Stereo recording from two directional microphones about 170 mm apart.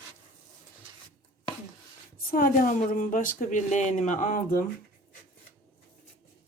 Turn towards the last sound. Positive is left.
turn(degrees=50)  # may be behind; listen again after turning